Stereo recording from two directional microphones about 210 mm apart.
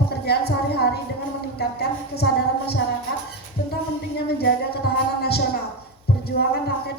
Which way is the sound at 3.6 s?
50° left (ahead or behind).